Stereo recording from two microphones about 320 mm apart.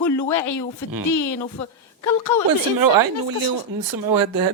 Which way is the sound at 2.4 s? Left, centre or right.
Right.